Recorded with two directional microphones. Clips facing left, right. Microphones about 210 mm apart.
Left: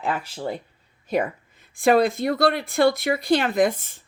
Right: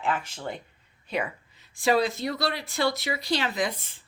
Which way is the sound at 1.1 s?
45° left (ahead or behind).